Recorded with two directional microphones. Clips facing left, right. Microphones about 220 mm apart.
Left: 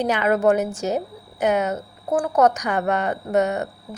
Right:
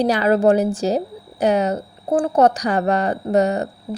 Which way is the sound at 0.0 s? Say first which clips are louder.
Right 3 dB; 35° right (ahead or behind).